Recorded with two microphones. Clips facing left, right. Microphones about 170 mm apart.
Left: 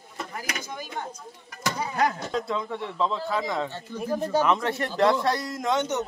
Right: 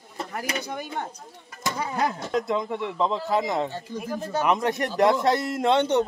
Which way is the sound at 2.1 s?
20° right (ahead or behind).